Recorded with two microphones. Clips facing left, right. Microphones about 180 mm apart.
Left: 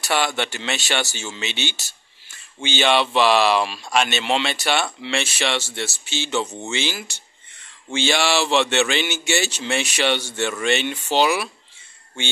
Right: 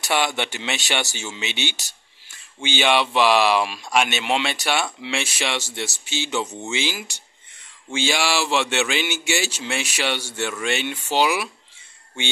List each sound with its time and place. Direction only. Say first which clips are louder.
0.0 s speech: even; 15° right (ahead or behind)